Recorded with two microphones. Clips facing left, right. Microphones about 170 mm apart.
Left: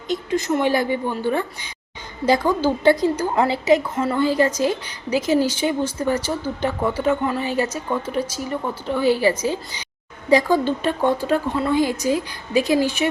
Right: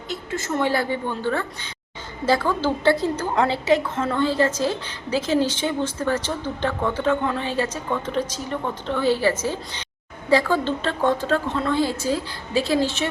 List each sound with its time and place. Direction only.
0.1 s a woman's voice: 20° left (ahead or behind)